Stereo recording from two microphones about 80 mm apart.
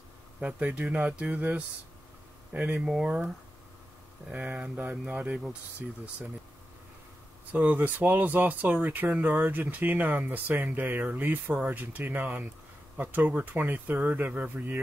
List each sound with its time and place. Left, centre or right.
0.4 s speech: centre
2.8 s speech: centre
4.3 s speech: centre
7.5 s speech: right